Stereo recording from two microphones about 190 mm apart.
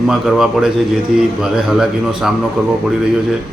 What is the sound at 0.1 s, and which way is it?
A man's voice, centre (ahead or behind).